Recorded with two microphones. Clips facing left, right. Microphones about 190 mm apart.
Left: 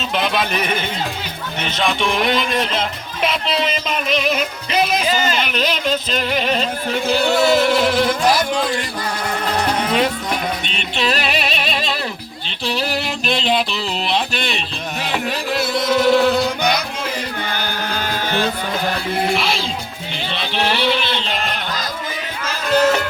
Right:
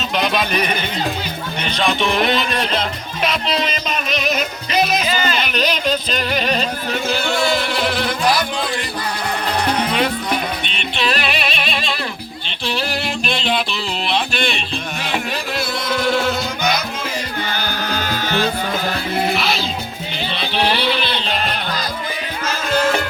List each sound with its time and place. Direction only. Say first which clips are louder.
0.1 s speech: right 1 dB; 15° right (ahead or behind)
0.5 s music: right 1 dB; 25° left (ahead or behind)
3.7 s music: left 2 dB; 25° left (ahead or behind)
7.1 s music: left 5 dB; 35° left (ahead or behind)
16.2 s music: left 5 dB; 35° left (ahead or behind)
18.1 s music: even; 50° left (ahead or behind)
19.3 s music: even; 30° left (ahead or behind)
20.8 s a sound: left 1 dB; 20° left (ahead or behind)